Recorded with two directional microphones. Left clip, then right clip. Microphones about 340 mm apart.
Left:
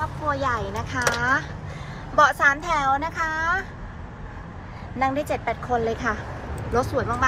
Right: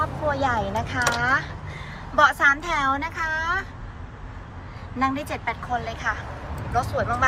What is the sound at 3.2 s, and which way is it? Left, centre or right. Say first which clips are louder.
Vehicle: right 2 dB; left.